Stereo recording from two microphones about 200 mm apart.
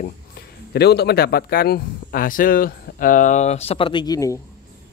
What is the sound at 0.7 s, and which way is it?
Speech, 55° left (ahead or behind).